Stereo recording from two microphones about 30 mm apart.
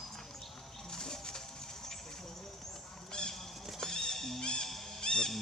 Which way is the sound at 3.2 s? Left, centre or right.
Left.